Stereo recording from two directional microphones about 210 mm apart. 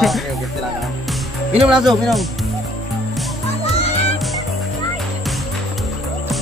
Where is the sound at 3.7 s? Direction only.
30° left (ahead or behind).